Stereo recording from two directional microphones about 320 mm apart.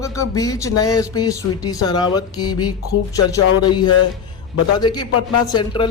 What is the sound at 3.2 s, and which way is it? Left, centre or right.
Speech, centre.